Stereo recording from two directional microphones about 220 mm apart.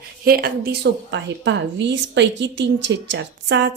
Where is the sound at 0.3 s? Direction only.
45° right (ahead or behind).